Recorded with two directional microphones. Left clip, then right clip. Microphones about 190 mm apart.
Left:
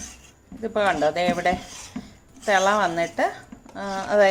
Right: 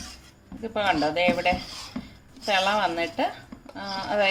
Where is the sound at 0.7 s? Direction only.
35° left (ahead or behind).